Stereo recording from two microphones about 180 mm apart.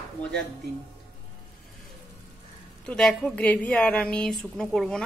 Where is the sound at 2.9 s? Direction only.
5° left (ahead or behind).